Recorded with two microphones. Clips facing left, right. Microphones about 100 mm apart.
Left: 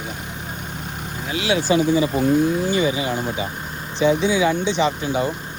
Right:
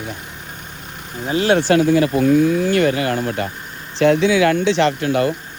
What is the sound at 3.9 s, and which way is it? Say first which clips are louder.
Speech: right 4 dB; 90° right.